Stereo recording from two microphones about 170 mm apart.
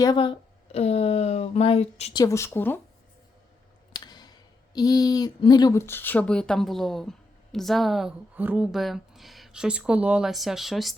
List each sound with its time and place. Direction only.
0.0 s speech: 25° left (ahead or behind)
2.1 s speech: 20° left (ahead or behind)
3.9 s speech: 25° left (ahead or behind); by 10.9 s centre (ahead or behind)